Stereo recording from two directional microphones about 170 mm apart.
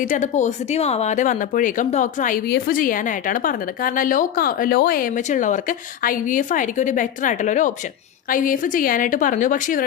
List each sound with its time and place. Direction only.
0.0 s speech: 45° left (ahead or behind)